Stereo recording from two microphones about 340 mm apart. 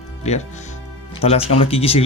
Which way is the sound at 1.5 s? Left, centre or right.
Centre.